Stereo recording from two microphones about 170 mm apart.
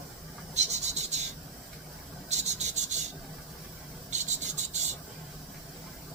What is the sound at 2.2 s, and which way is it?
Rub, 40° right (ahead or behind).